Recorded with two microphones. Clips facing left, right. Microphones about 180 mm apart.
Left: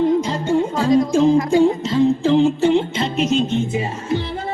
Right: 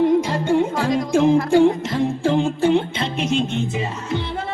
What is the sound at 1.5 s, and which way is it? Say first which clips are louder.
Music: left 1 dB; 55° right (ahead or behind).